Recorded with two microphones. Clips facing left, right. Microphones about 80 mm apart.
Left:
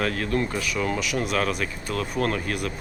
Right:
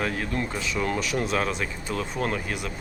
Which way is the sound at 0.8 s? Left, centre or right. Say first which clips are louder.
Right 1 dB; right.